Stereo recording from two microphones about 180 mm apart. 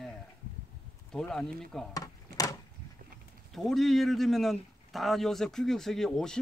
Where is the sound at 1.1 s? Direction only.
5° left (ahead or behind).